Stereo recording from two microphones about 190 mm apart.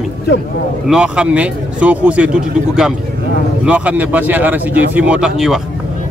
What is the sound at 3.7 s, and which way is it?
Speech, 10° right (ahead or behind).